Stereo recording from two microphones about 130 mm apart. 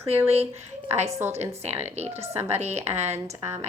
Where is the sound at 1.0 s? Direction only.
25° right (ahead or behind).